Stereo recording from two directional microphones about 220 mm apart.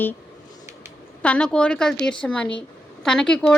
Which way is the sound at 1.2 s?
5° left (ahead or behind).